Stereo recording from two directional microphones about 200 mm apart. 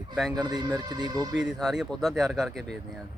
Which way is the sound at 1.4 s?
Centre (ahead or behind).